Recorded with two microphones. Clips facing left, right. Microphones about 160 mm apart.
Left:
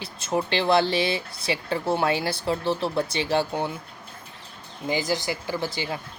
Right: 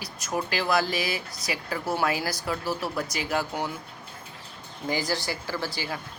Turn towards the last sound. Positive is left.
turn(degrees=20)  # may be behind; listen again after turning